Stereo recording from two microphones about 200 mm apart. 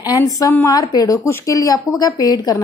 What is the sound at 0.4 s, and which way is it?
A woman's voice, 15° left (ahead or behind).